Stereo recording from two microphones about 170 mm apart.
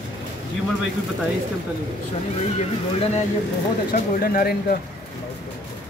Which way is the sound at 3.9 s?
60° left (ahead or behind).